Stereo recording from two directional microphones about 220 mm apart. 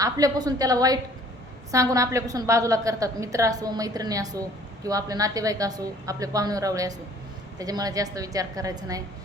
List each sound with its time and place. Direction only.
0.0 s a woman's voice: 15° right (ahead or behind)